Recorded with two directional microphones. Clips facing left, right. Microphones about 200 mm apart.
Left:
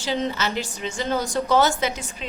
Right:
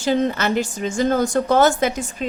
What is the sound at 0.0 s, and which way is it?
A woman's voice, 50° right (ahead or behind).